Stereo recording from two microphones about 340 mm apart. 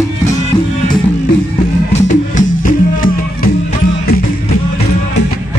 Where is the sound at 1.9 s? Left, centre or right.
Centre.